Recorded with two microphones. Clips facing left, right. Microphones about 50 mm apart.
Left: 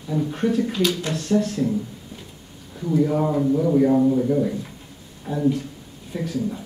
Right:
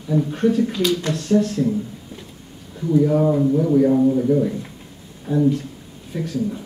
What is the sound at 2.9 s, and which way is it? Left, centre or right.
Speech, centre.